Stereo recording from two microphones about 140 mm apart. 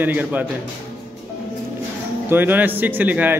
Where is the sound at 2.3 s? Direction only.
15° right (ahead or behind).